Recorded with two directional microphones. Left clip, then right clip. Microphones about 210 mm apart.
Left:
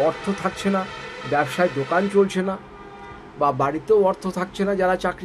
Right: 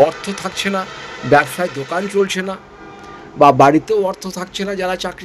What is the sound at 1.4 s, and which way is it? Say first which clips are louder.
Speech: right 1 dB; centre (ahead or behind).